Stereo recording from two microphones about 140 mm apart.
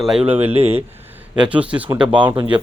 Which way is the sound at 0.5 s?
45° right (ahead or behind).